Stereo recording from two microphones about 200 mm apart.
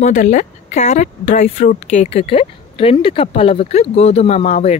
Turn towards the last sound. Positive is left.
turn(degrees=35)  # may be behind; listen again after turning